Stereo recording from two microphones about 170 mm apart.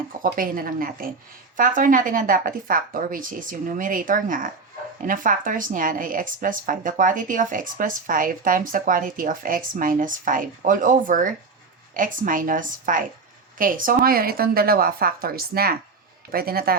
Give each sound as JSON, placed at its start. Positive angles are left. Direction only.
{"t": 0.2, "sound": "a woman's voice", "side_deg": -55}